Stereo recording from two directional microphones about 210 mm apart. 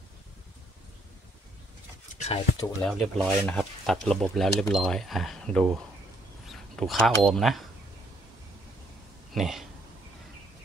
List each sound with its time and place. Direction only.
2.2 s speech: 25° left (ahead or behind)
2.8 s speech: centre (ahead or behind)
9.3 s speech: centre (ahead or behind)